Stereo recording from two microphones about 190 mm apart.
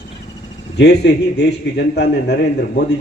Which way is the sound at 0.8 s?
60° left (ahead or behind).